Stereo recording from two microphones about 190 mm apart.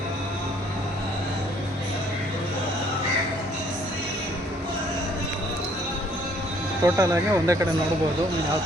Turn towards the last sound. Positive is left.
turn(degrees=-15)  # may be behind; listen again after turning